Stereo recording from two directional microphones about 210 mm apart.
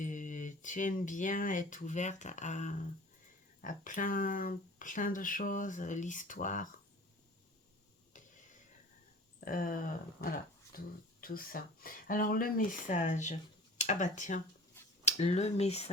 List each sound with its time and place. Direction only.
0.0 s speech: 35° left (ahead or behind)
8.1 s a sound: 40° left (ahead or behind)
9.4 s speech: 40° left (ahead or behind)